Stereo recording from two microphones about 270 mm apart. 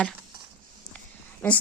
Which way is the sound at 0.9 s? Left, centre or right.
Centre.